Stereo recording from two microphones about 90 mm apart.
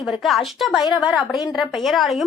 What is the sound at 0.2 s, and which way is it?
A woman's voice, centre (ahead or behind).